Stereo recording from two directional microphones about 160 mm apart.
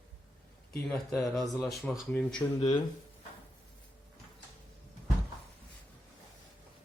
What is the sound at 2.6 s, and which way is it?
Speech, 30° left (ahead or behind).